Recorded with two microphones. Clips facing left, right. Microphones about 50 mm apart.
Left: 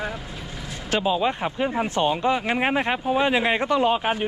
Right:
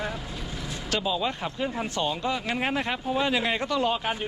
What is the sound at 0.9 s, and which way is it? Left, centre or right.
Speech, left.